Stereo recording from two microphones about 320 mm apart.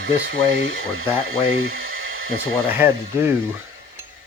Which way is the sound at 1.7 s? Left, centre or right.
Right.